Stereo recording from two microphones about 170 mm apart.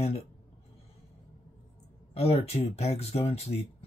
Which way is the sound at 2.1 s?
35° left (ahead or behind).